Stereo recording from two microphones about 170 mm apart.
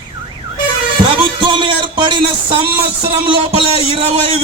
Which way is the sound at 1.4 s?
30° right (ahead or behind).